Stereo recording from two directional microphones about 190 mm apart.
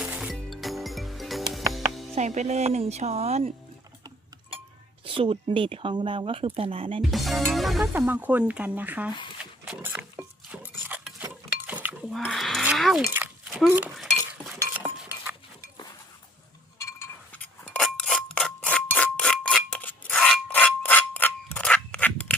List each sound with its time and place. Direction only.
0.0 s music: 5° right (ahead or behind)
2.1 s speech: 40° right (ahead or behind)
5.0 s speech: 30° right (ahead or behind)
7.1 s music: centre (ahead or behind)
7.9 s speech: 10° right (ahead or behind)
9.4 s dog: 5° right (ahead or behind)
10.7 s dishes: 10° right (ahead or behind)
12.2 s a sound: centre (ahead or behind)
13.1 s a sound: 10° right (ahead or behind)
13.7 s cutlery: 10° right (ahead or behind)
16.8 s a sound: 10° left (ahead or behind)